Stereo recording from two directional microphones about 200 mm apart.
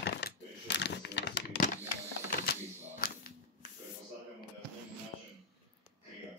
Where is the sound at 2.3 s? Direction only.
45° left (ahead or behind).